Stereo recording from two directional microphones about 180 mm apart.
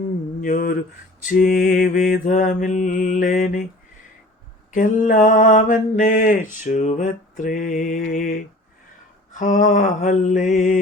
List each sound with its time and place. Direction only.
0.4 s mantra: 50° left (ahead or behind)
4.7 s mantra: 45° left (ahead or behind)